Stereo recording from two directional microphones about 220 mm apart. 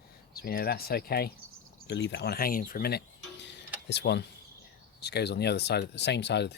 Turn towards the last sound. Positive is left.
turn(degrees=50)  # may be behind; listen again after turning